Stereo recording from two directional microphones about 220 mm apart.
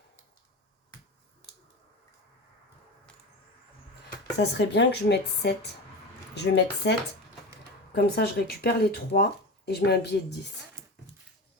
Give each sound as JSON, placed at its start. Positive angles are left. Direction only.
{"t": 4.4, "sound": "speech", "side_deg": 50}
{"t": 7.9, "sound": "speech", "side_deg": 45}